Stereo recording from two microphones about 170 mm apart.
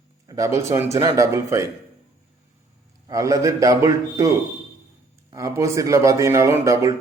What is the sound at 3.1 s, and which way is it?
A man's voice, 20° right (ahead or behind).